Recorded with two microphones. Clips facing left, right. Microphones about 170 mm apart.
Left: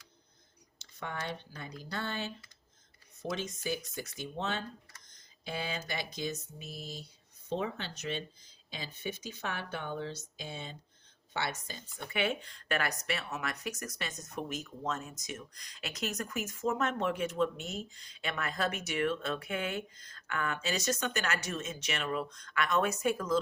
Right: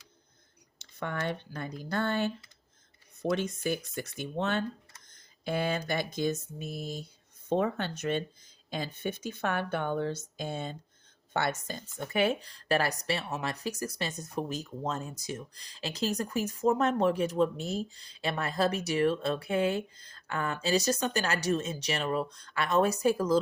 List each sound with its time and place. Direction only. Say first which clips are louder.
0.8 s speech: right 5 dB; 55° right (ahead or behind)
5.0 s a sound: right 8 dB; 55° right (ahead or behind)
5.9 s speech: right 7 dB; 50° right (ahead or behind); by 23.4 s 35° right (ahead or behind)